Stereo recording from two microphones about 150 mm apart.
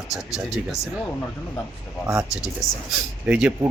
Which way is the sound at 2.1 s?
15° right (ahead or behind).